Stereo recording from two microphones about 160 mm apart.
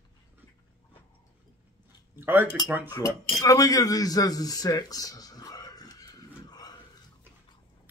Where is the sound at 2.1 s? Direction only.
15° right (ahead or behind).